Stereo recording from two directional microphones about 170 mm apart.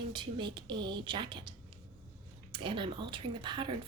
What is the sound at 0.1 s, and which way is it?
A woman's voice, 25° right (ahead or behind).